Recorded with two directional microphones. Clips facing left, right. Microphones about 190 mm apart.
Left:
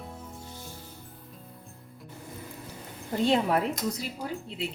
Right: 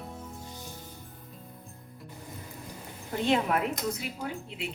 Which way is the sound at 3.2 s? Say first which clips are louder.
Left 2 dB; 35° left (ahead or behind).